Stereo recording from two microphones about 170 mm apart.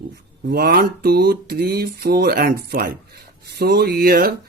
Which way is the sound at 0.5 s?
65° right (ahead or behind).